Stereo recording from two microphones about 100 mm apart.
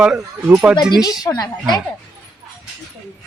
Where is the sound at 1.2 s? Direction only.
40° left (ahead or behind).